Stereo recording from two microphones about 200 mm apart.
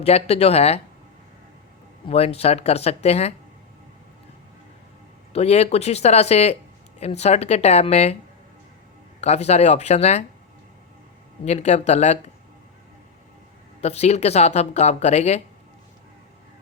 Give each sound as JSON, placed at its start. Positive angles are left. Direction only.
{"t": 0.0, "sound": "speech", "side_deg": 30}
{"t": 2.0, "sound": "speech", "side_deg": 30}
{"t": 5.3, "sound": "speech", "side_deg": 30}
{"t": 9.2, "sound": "speech", "side_deg": 30}
{"t": 11.4, "sound": "speech", "side_deg": 35}
{"t": 13.8, "sound": "speech", "side_deg": 30}